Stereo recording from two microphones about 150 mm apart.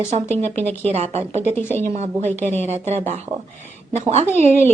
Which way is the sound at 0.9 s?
45° right (ahead or behind).